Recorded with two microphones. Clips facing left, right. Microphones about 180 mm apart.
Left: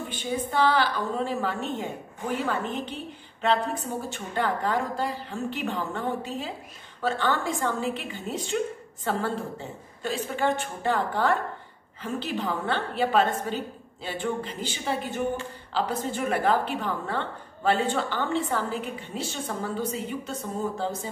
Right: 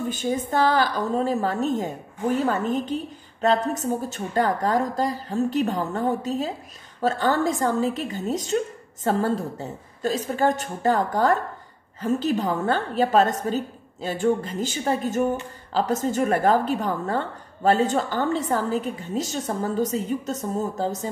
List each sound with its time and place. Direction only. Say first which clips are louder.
0.1 s a woman's voice: right 2 dB; 45° right (ahead or behind)